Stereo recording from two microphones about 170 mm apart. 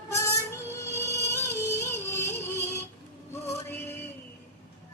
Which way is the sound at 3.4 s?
15° left (ahead or behind).